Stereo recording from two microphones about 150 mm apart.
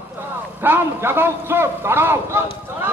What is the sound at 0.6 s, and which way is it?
A man's voice, 15° right (ahead or behind).